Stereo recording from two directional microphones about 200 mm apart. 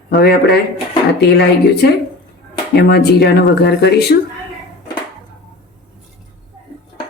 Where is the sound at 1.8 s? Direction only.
55° left (ahead or behind).